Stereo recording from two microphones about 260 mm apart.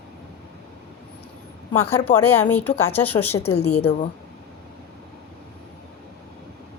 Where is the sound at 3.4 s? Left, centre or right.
Left.